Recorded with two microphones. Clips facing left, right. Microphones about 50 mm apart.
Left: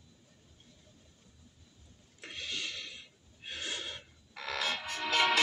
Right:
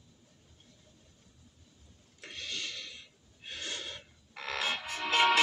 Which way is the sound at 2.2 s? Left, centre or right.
Centre.